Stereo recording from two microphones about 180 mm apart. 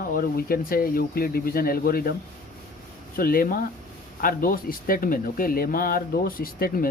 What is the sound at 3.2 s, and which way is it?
Speech, 55° left (ahead or behind).